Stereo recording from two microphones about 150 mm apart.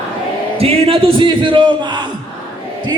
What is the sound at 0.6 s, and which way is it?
Speech, 40° right (ahead or behind).